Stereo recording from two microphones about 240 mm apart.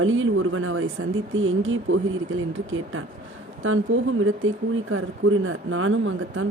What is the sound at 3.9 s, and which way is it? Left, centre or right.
Speech, right.